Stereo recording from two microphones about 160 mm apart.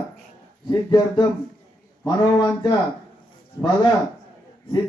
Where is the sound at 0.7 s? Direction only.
25° left (ahead or behind).